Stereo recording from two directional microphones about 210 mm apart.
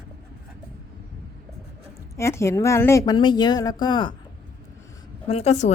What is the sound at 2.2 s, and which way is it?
A woman's voice, 15° left (ahead or behind).